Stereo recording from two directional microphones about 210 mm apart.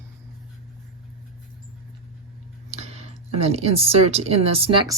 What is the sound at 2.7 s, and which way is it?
Speech, 30° right (ahead or behind).